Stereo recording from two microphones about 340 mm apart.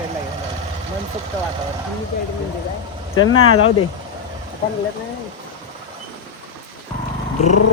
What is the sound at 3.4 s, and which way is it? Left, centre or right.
Speech, left.